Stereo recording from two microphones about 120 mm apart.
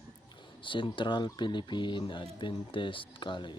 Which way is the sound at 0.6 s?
45° left (ahead or behind).